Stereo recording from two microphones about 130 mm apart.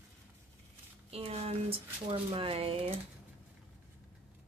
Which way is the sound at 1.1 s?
50° right (ahead or behind).